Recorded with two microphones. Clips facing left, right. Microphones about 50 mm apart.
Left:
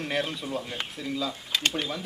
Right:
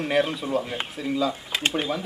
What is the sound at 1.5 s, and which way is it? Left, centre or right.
Speech, right.